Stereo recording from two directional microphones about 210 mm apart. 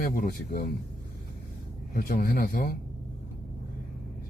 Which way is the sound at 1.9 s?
45° left (ahead or behind).